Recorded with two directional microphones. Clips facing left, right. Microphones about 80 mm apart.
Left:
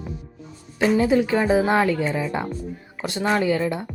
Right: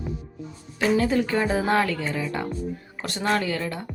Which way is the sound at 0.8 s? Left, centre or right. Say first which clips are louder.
Left 3 dB; centre.